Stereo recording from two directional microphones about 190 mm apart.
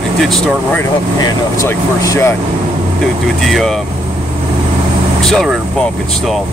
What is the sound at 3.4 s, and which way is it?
Speech, centre (ahead or behind).